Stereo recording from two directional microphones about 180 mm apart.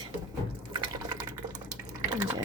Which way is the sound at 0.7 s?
25° right (ahead or behind).